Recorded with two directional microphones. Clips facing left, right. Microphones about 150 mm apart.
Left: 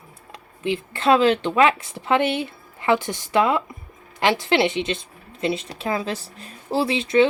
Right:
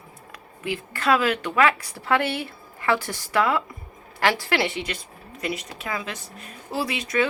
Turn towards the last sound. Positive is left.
turn(degrees=25)  # may be behind; listen again after turning